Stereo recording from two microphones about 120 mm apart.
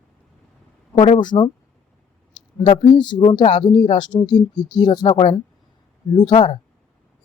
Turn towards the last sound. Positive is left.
turn(degrees=45)  # may be behind; listen again after turning